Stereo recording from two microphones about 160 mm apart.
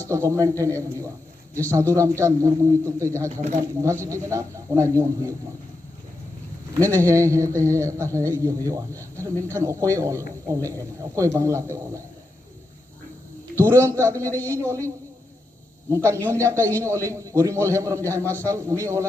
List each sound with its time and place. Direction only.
0.1 s speech: 20° right (ahead or behind)
6.7 s a man's voice: 20° right (ahead or behind)
13.6 s a man's voice: 15° right (ahead or behind)
16.0 s a man's voice: 15° right (ahead or behind)